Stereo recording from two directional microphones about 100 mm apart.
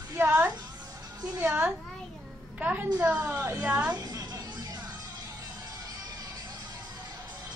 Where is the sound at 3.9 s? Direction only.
35° right (ahead or behind).